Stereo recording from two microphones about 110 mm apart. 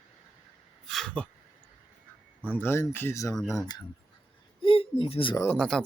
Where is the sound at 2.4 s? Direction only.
20° left (ahead or behind).